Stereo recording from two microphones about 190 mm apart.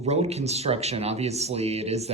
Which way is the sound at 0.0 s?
35° right (ahead or behind).